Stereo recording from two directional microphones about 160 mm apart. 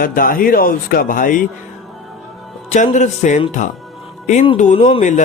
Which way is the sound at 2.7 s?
45° left (ahead or behind).